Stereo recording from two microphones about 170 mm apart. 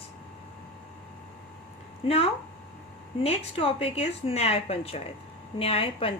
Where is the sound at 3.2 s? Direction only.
35° left (ahead or behind).